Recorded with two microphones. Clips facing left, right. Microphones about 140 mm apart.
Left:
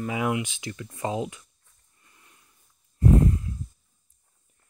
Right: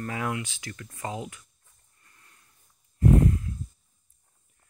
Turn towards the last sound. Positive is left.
turn(degrees=25)  # may be behind; listen again after turning